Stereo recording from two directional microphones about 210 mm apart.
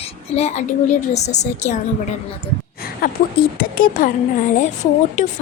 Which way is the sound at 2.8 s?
45° left (ahead or behind).